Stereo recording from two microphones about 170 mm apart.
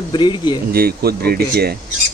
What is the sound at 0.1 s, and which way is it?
Speech, 25° left (ahead or behind).